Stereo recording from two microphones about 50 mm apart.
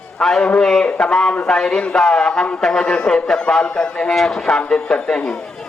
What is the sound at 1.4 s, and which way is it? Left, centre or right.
A man's voice, centre.